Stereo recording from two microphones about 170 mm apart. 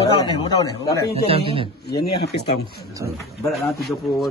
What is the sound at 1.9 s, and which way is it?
Speech, 75° left (ahead or behind).